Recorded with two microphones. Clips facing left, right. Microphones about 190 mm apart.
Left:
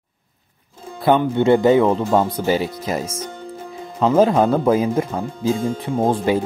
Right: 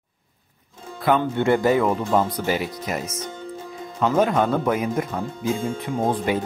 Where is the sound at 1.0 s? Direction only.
25° left (ahead or behind).